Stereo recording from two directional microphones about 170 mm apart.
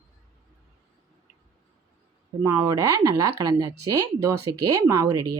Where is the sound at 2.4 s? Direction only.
20° right (ahead or behind).